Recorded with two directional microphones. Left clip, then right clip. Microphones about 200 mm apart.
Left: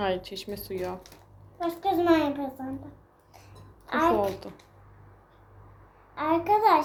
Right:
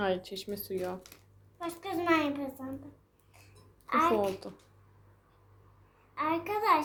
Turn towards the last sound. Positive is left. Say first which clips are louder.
# left 7 dB
turn(degrees=-40)  # may be behind; listen again after turning